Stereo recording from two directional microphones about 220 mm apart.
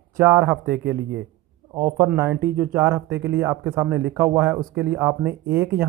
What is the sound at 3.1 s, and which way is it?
Speech, 50° right (ahead or behind).